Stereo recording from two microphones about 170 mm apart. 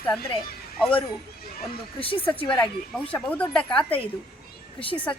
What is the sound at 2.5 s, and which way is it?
A woman's voice, 10° left (ahead or behind).